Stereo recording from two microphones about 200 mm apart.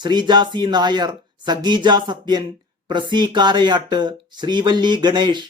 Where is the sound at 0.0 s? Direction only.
20° right (ahead or behind).